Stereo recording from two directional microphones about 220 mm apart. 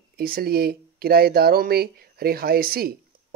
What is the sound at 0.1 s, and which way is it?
Speech, 45° right (ahead or behind).